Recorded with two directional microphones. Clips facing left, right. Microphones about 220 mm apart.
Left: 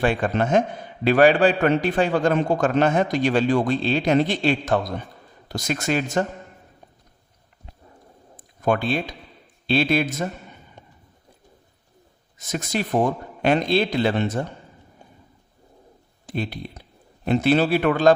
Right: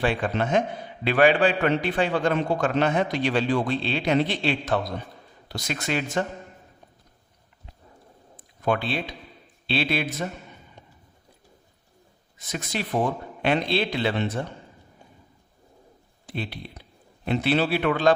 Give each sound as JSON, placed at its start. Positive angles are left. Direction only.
{"t": 0.0, "sound": "a man's voice", "side_deg": 45}
{"t": 8.4, "sound": "a man's voice", "side_deg": 45}
{"t": 12.4, "sound": "a man's voice", "side_deg": 45}
{"t": 16.2, "sound": "a man's voice", "side_deg": 45}